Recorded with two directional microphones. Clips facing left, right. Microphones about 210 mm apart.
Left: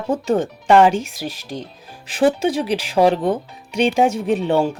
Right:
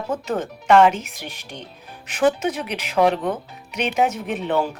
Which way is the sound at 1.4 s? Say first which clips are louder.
Left 7 dB; 90° left.